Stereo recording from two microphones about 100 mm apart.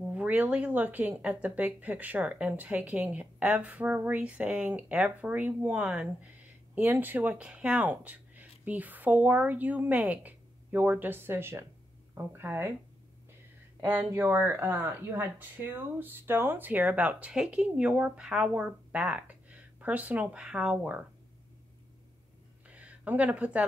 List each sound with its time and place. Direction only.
0.1 s speech: 15° right (ahead or behind)
13.7 s speech: 20° right (ahead or behind)
22.7 s a sound: 15° right (ahead or behind)